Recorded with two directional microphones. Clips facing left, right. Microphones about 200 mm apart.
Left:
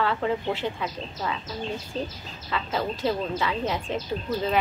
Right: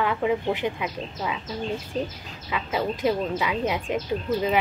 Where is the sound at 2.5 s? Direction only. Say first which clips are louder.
Right 2 dB; 10° right (ahead or behind).